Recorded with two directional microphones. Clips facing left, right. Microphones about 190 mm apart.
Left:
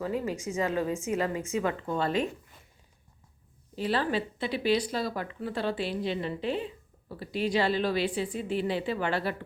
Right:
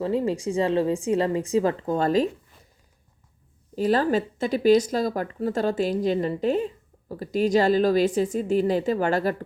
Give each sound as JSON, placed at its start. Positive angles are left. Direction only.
{"t": 0.0, "sound": "a woman's voice", "side_deg": -30}
{"t": 3.8, "sound": "speech", "side_deg": -45}